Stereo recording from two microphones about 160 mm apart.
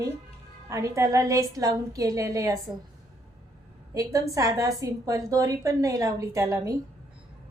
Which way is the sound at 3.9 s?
20° right (ahead or behind).